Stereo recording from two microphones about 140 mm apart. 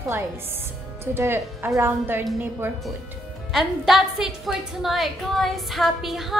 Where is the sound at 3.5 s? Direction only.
5° right (ahead or behind).